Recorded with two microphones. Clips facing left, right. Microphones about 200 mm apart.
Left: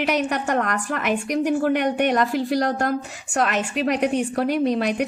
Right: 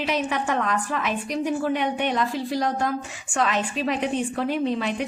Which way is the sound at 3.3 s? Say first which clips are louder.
Left 2 dB; 60° left (ahead or behind).